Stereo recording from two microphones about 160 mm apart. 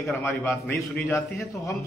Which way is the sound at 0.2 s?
15° left (ahead or behind).